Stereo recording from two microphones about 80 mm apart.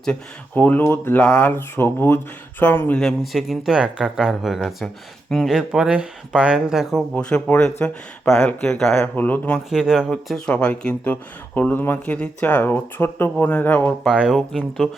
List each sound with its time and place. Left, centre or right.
0.5 s speech: left
1.2 s speech: centre
1.5 s speech: left
3.3 s speech: centre
5.5 s speech: centre
7.2 s speech: centre
9.1 s speech: left
9.6 s speech: centre
10.1 s speech: centre; by 13.9 s left
14.0 s speech: centre